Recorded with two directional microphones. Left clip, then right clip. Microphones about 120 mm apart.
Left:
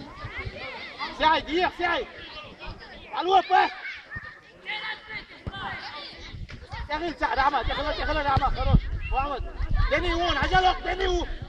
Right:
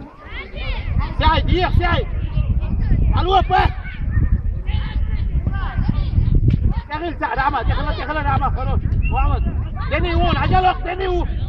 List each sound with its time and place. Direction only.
1.2 s a man's voice: 35° left (ahead or behind)
3.1 s a man's voice: 35° left (ahead or behind)
6.9 s speech: 40° left (ahead or behind)